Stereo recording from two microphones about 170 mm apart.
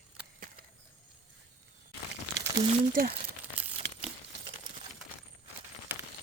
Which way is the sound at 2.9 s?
60° right (ahead or behind).